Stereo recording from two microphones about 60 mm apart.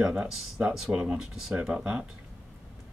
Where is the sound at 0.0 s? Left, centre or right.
Centre.